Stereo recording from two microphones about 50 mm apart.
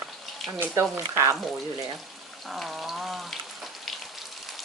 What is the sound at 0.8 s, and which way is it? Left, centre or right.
Speech, right.